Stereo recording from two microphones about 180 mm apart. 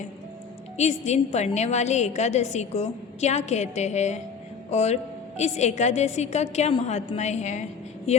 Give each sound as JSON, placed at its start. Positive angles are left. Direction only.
{"t": 0.8, "sound": "a woman's voice", "side_deg": 40}